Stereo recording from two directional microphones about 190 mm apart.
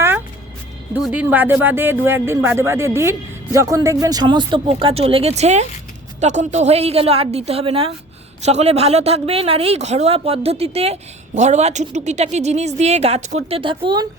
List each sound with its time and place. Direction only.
0.9 s a woman's voice: 5° right (ahead or behind); by 14.1 s 25° right (ahead or behind)